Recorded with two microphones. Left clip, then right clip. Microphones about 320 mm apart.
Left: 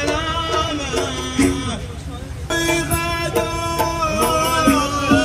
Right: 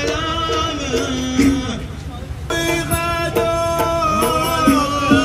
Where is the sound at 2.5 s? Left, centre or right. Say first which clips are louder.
Even; left.